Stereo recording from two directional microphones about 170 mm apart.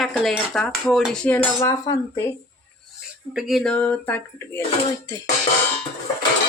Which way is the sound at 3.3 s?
Centre (ahead or behind).